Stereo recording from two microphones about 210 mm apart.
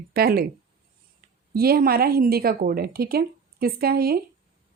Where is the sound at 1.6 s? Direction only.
45° right (ahead or behind).